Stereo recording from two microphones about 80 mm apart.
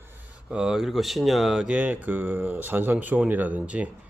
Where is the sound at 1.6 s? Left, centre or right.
Centre.